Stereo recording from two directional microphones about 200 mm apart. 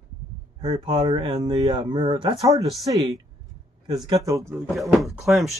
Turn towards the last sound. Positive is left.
turn(degrees=0)  # may be behind; listen again after turning